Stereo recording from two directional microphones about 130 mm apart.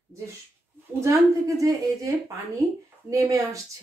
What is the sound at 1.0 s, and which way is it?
Speech, 25° right (ahead or behind).